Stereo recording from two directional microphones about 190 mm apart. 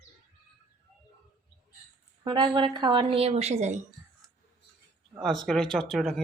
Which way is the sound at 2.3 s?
25° right (ahead or behind).